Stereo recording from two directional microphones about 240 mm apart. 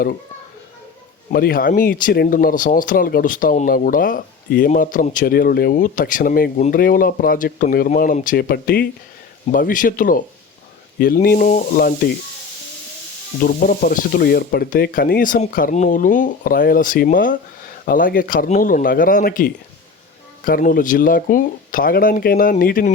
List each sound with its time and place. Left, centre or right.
1.3 s speech: left
13.4 s speech: left